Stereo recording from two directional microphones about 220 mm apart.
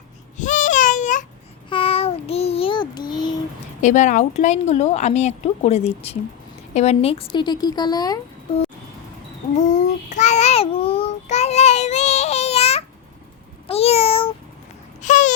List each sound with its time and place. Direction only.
0.3 s a sound: 35° left (ahead or behind)
1.7 s child singing: 25° left (ahead or behind)
3.8 s speech: 35° left (ahead or behind); by 8.2 s 15° left (ahead or behind)
9.6 s child singing: 35° left (ahead or behind)
13.7 s meow: 25° left (ahead or behind)
15.0 s a sound: 35° left (ahead or behind)